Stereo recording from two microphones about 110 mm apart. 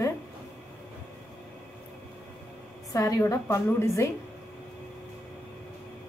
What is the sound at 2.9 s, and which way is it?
A woman's voice, 30° left (ahead or behind).